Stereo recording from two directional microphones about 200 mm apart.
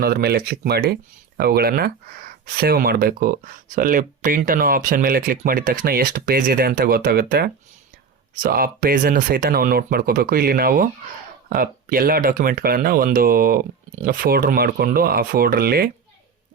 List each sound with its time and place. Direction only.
0.0 s speech: 50° right (ahead or behind)